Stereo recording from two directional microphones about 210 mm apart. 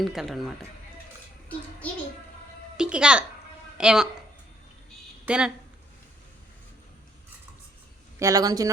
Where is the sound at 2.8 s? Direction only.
5° right (ahead or behind).